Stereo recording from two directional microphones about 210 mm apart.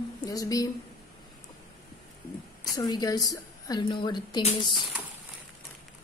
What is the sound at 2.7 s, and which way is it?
A woman's voice, 20° left (ahead or behind).